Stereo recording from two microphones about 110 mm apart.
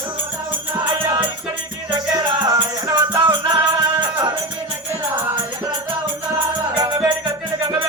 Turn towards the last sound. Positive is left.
turn(degrees=-35)  # may be behind; listen again after turning